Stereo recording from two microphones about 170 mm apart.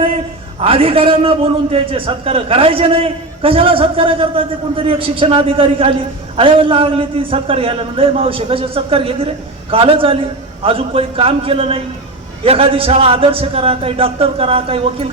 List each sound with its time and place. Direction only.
0.6 s a man's voice: 35° right (ahead or behind)